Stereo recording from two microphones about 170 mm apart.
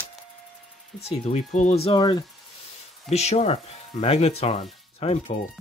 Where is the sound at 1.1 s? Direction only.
40° left (ahead or behind).